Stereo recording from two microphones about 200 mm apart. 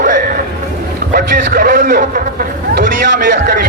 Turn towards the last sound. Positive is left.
turn(degrees=-50)  # may be behind; listen again after turning